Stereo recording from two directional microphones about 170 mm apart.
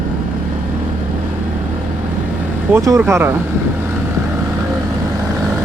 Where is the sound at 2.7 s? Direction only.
15° right (ahead or behind).